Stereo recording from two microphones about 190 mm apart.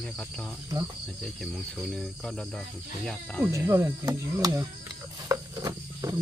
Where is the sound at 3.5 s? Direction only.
15° right (ahead or behind).